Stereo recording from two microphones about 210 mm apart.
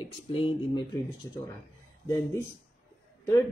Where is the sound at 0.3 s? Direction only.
25° left (ahead or behind).